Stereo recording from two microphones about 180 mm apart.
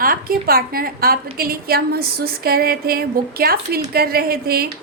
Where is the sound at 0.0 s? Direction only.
55° right (ahead or behind).